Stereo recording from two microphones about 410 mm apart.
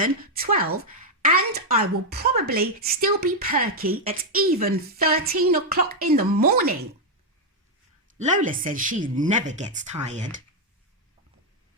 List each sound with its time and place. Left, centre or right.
0.0 s a woman's voice: right
8.2 s speech: centre